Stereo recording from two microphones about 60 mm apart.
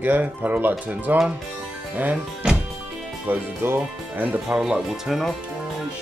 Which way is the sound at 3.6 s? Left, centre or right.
Right.